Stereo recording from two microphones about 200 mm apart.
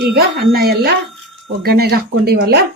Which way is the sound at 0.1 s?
50° right (ahead or behind).